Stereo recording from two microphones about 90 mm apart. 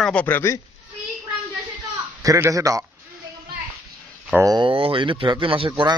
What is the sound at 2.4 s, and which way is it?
Speech, 40° right (ahead or behind).